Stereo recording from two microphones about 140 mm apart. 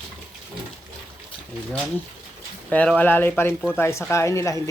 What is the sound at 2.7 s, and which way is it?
Speech, 10° left (ahead or behind).